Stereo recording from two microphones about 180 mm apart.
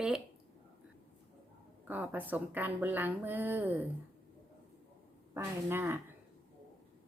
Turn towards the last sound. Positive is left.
turn(degrees=-10)  # may be behind; listen again after turning